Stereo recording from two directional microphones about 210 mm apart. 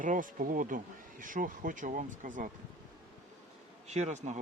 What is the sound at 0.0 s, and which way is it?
Speech, 40° right (ahead or behind).